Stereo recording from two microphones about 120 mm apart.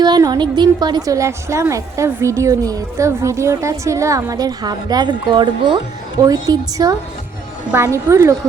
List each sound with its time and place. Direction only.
0.0 s a woman's voice: 35° right (ahead or behind)